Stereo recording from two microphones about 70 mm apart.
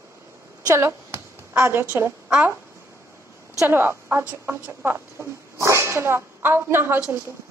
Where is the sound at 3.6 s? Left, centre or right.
Right.